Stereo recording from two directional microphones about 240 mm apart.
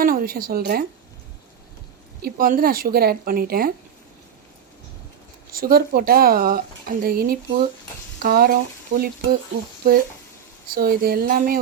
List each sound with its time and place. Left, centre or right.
0.0 s a woman's voice: right
2.2 s speech: right
5.5 s speech: right